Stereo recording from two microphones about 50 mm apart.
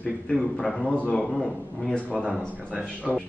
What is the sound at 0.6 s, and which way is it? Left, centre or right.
A man's voice, centre.